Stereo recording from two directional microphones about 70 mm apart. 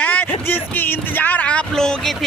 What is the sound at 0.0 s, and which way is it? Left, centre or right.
Speech, left.